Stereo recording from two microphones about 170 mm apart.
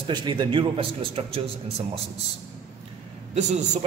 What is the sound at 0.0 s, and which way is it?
A man's voice, 25° right (ahead or behind).